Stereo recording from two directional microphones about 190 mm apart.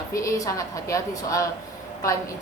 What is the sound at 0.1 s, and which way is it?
A woman's voice, 15° left (ahead or behind).